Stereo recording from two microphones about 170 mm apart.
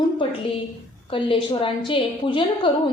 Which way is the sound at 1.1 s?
30° left (ahead or behind).